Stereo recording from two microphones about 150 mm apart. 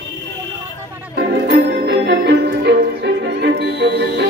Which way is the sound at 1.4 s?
85° right.